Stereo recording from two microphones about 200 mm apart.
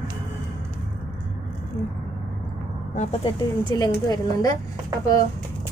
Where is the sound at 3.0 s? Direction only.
25° left (ahead or behind).